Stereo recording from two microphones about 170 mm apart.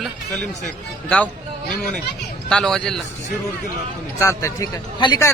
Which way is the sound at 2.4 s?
5° left (ahead or behind).